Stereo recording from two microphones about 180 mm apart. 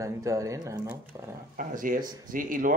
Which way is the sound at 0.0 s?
20° right (ahead or behind).